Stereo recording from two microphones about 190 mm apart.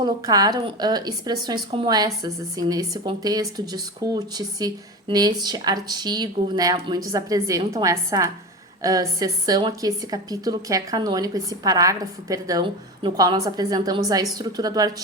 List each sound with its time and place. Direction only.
0.0 s a woman's voice: 20° right (ahead or behind)